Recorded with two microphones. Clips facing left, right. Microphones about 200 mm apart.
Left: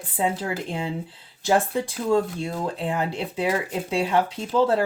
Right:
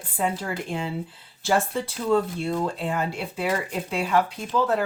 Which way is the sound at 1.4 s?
15° left (ahead or behind).